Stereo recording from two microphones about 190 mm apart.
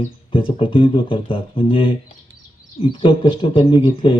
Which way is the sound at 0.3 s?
25° left (ahead or behind).